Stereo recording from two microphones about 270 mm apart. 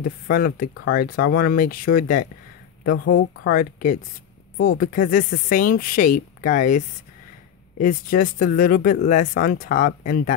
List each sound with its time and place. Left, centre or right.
0.3 s speech: left